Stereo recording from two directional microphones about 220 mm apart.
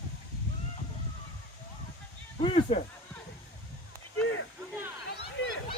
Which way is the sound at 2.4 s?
25° left (ahead or behind).